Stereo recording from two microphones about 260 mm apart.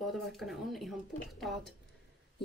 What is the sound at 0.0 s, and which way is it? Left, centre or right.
Speech, centre.